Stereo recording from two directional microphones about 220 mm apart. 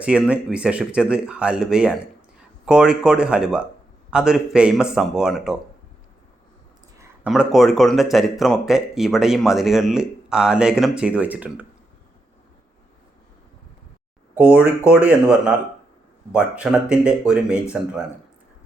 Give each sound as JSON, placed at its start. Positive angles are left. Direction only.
{"t": 0.0, "sound": "speech", "side_deg": -5}
{"t": 7.3, "sound": "speech", "side_deg": 0}
{"t": 14.3, "sound": "speech", "side_deg": -5}